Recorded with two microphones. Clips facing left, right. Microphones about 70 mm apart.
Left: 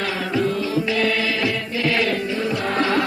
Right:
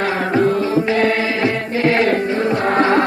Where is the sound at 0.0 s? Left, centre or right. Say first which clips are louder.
Right 6 dB; right.